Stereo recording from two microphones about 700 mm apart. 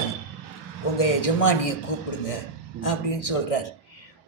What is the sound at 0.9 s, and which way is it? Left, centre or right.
A man's voice, left.